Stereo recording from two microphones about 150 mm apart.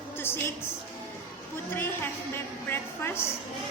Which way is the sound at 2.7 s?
15° left (ahead or behind).